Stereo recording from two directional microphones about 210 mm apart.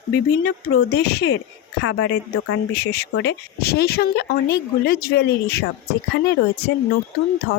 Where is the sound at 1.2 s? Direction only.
60° left (ahead or behind).